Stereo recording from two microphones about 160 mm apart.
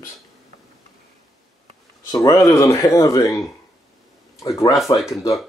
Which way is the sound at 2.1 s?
20° left (ahead or behind).